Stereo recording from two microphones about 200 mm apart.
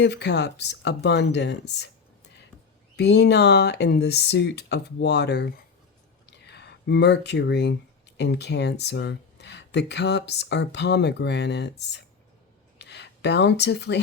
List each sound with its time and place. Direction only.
0.0 s speech: 60° left (ahead or behind)
2.9 s speech: 60° left (ahead or behind)